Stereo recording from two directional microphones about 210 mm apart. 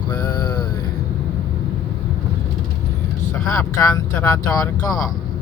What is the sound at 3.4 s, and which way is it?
Speech, 15° left (ahead or behind).